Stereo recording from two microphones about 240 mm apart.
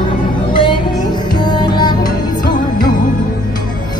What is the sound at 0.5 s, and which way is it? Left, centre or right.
Music, left.